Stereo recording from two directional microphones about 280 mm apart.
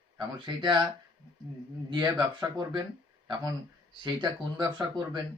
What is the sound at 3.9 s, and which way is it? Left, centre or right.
Speech, centre.